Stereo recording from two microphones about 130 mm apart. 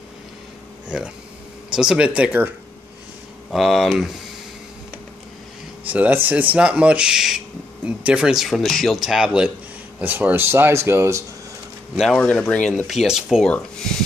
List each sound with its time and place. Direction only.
0.8 s speech: 5° right (ahead or behind)
3.5 s speech: centre (ahead or behind)
5.9 s speech: 10° right (ahead or behind)
11.9 s speech: centre (ahead or behind)